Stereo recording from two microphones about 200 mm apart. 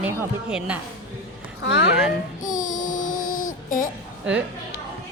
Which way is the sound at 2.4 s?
40° left (ahead or behind).